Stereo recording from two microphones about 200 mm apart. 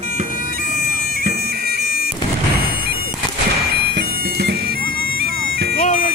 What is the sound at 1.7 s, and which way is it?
Bagpipes, 50° left (ahead or behind).